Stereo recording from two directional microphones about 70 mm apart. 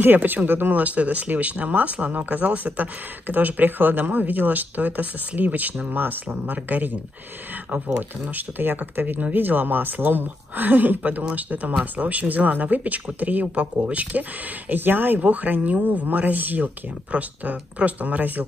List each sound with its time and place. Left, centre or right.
0.0 s speech: right
14.7 s speech: right